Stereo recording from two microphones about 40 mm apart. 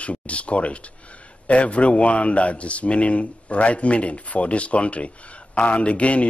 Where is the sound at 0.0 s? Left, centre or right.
Left.